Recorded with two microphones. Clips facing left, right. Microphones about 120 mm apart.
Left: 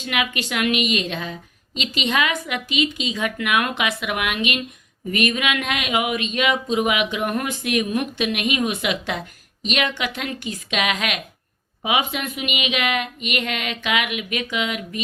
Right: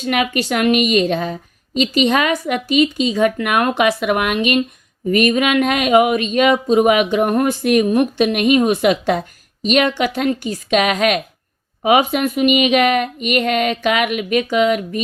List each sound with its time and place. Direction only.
0.0 s speech: 40° right (ahead or behind)